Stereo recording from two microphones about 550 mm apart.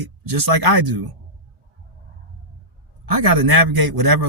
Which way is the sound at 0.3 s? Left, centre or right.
Right.